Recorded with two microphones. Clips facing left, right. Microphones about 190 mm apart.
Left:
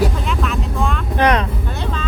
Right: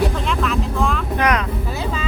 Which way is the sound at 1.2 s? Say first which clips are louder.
Left 4 dB; 30° left (ahead or behind).